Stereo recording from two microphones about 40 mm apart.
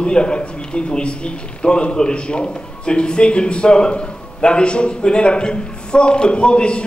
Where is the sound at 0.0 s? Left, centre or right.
Left.